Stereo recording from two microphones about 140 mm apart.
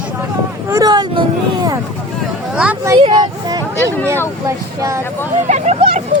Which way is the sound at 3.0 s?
30° right (ahead or behind).